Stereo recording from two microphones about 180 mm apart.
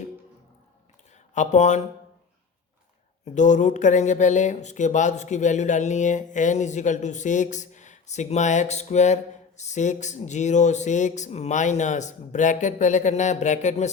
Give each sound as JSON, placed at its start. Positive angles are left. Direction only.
{"t": 1.3, "sound": "speech", "side_deg": 40}
{"t": 3.3, "sound": "speech", "side_deg": 45}